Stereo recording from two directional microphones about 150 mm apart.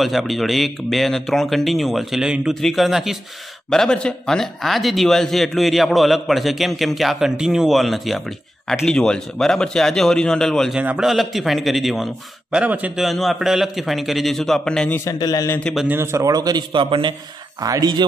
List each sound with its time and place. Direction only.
0.0 s a man's voice: centre (ahead or behind)
15.0 s a man's voice: 25° left (ahead or behind)
15.6 s a man's voice: centre (ahead or behind)
15.9 s a man's voice: 15° right (ahead or behind)